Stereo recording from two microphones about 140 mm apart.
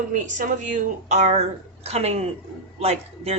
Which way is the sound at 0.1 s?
65° right (ahead or behind).